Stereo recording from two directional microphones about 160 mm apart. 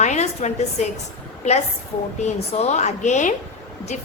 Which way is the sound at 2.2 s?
45° left (ahead or behind).